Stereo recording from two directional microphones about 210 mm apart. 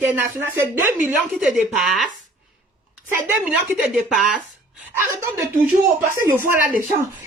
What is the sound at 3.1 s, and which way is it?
Speech, 10° right (ahead or behind).